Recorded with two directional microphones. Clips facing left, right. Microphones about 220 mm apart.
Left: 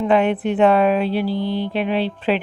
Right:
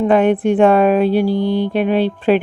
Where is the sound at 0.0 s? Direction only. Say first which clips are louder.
Right 4 dB; 50° right (ahead or behind).